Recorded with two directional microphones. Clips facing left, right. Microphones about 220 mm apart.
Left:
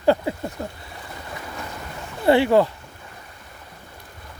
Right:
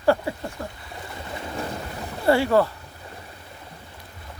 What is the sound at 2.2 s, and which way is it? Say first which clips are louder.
Speech: left 3 dB; 20° left (ahead or behind).